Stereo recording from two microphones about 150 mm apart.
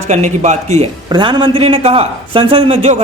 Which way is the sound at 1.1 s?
30° right (ahead or behind).